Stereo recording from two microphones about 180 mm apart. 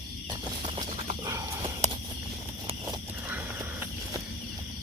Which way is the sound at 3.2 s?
10° right (ahead or behind).